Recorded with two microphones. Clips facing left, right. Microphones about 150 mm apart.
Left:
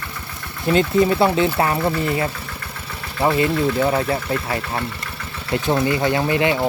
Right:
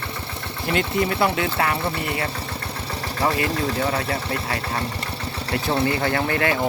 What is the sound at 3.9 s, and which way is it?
Speech, 30° left (ahead or behind).